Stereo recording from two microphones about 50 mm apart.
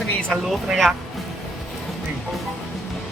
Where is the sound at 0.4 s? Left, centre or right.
Centre.